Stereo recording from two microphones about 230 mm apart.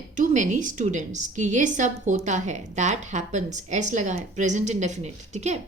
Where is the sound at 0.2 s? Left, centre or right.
Right.